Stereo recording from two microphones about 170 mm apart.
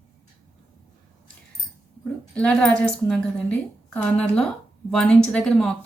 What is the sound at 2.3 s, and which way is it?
A woman's voice, 5° left (ahead or behind).